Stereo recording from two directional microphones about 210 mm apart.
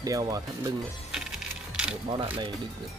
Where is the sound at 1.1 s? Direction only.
5° right (ahead or behind).